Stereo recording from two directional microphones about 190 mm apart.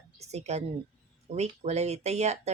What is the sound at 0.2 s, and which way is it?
A woman's voice, 35° right (ahead or behind).